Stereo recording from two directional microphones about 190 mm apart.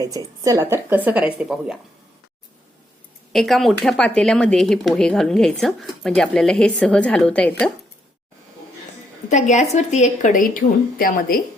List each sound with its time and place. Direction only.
0.0 s speech: 20° right (ahead or behind)
3.3 s speech: centre (ahead or behind)
9.3 s a woman's voice: 40° left (ahead or behind)